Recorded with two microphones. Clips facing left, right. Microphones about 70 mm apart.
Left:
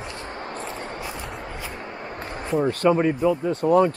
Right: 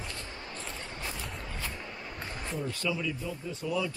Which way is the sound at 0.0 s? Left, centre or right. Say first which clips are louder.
Left 8 dB; left.